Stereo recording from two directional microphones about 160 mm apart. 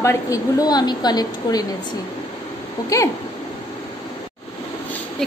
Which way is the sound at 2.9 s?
20° left (ahead or behind).